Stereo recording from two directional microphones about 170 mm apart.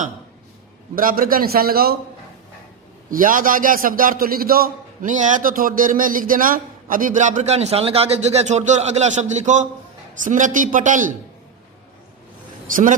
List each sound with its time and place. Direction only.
0.9 s a man's voice: 55° right (ahead or behind)
3.1 s a man's voice: 55° right (ahead or behind)